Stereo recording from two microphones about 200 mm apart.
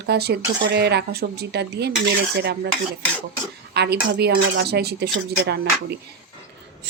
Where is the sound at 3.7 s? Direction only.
55° right (ahead or behind).